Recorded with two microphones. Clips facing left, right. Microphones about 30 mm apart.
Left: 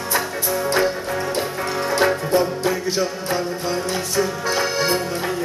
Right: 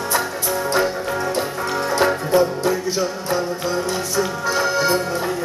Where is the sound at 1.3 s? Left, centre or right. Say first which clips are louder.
Right 1 dB; centre.